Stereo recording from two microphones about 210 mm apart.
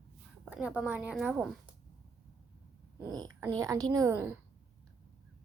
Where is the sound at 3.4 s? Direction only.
15° right (ahead or behind).